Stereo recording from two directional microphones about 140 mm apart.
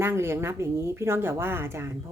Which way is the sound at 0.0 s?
15° right (ahead or behind).